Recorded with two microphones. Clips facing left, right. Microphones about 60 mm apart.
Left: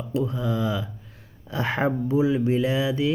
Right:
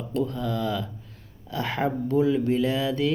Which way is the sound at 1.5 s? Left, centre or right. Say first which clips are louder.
Left 2 dB; left.